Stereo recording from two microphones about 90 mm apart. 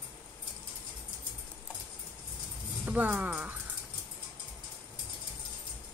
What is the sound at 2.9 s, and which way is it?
Speech, 15° right (ahead or behind).